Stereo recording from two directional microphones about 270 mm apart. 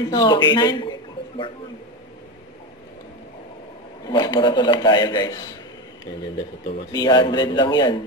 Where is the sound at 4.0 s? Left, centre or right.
Centre.